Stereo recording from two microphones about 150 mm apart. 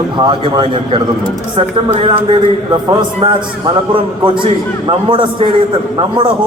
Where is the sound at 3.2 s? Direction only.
40° right (ahead or behind).